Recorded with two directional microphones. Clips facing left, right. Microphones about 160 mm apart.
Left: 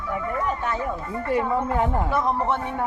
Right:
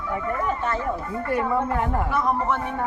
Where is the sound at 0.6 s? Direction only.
15° left (ahead or behind).